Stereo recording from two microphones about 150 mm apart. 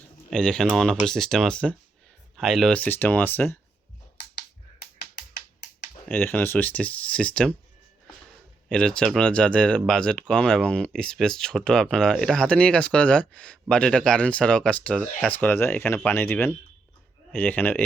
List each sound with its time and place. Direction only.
0.3 s speech: 5° left (ahead or behind)
4.8 s music: 90° left
6.1 s speech: 10° left (ahead or behind)
8.7 s speech: 5° left (ahead or behind)